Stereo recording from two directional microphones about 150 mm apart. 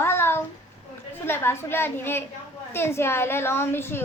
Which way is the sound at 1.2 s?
15° left (ahead or behind).